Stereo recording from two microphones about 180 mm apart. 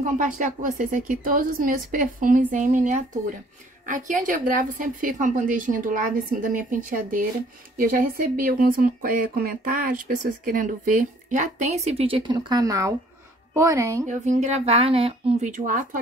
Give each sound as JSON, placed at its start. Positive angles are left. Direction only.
{"t": 0.2, "sound": "speech", "side_deg": -45}
{"t": 14.0, "sound": "speech", "side_deg": -45}